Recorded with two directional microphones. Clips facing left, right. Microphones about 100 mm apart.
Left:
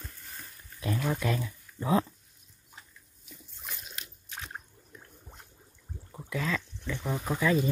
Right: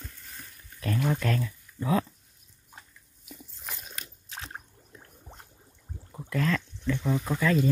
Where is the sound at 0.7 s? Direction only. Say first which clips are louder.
Right 2 dB; 15° left (ahead or behind).